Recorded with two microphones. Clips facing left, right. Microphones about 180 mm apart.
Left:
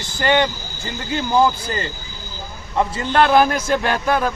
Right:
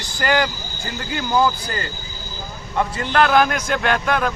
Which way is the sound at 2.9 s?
25° left (ahead or behind).